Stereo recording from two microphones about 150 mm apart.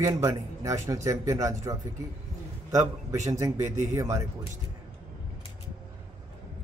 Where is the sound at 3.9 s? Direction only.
20° right (ahead or behind).